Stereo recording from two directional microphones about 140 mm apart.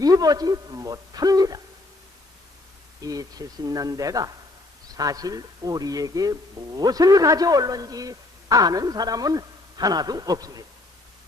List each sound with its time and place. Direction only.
0.0 s speech: 25° right (ahead or behind)
3.0 s speech: 25° right (ahead or behind)